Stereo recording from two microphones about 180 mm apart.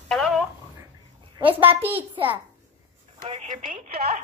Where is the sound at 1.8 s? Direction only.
10° right (ahead or behind).